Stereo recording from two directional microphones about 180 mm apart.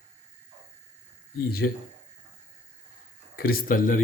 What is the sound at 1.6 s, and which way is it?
Speech, 65° left (ahead or behind).